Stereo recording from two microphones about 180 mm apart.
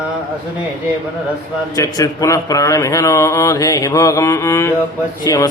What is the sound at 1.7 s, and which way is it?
Mantra, 20° left (ahead or behind).